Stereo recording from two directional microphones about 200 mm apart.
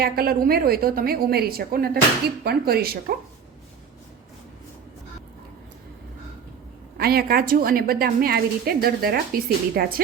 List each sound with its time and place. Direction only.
0.0 s a woman's voice: 50° right (ahead or behind)
6.9 s a woman's voice: 50° right (ahead or behind)